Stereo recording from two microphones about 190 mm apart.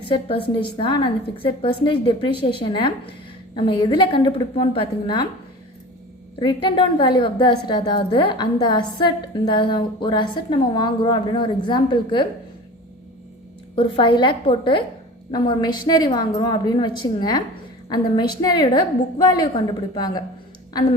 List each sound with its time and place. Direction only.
0.0 s a woman's voice: 30° left (ahead or behind)
6.4 s a woman's voice: 25° left (ahead or behind)
13.7 s a woman's voice: 25° left (ahead or behind)